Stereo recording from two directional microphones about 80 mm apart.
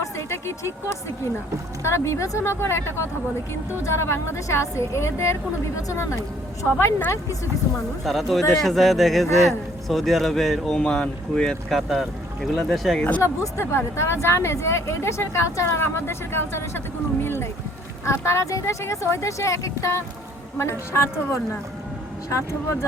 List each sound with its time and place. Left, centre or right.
0.0 s a sound: left
1.8 s speech: left
8.0 s speech: centre
13.2 s speech: left